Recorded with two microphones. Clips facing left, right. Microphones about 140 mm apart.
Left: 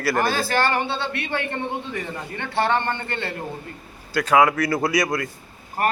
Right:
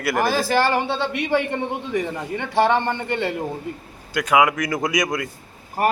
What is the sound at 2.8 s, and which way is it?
A man's voice, 10° right (ahead or behind).